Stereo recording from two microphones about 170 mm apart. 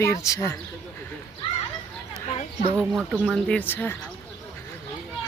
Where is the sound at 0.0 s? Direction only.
15° left (ahead or behind).